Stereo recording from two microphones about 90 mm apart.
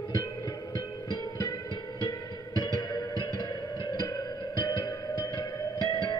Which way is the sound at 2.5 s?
55° left (ahead or behind).